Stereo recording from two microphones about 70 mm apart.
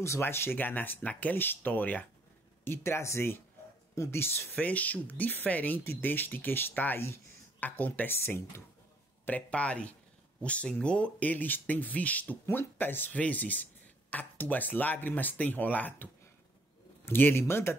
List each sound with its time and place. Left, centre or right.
0.0 s speech: left
2.6 s a man's voice: left
4.6 s speech: left
9.2 s a man's voice: left